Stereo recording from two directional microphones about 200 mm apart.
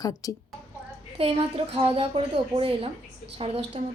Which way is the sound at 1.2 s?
30° right (ahead or behind).